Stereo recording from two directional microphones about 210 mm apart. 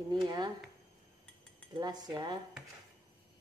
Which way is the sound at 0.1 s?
20° right (ahead or behind).